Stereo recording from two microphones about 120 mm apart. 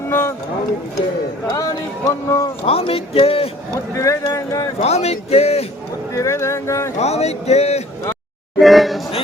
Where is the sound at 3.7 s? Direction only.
30° left (ahead or behind).